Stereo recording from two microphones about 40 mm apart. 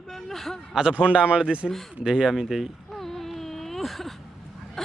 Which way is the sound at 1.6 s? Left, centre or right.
Centre.